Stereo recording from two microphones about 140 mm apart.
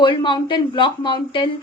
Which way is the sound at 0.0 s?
35° left (ahead or behind).